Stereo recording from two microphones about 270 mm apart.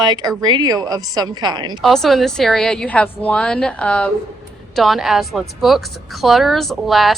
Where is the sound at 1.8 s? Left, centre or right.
Centre.